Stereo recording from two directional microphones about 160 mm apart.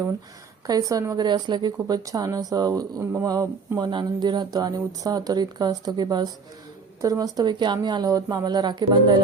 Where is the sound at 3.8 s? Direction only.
25° right (ahead or behind).